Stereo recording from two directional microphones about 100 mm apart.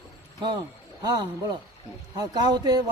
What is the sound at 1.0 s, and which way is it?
Speech, 45° right (ahead or behind).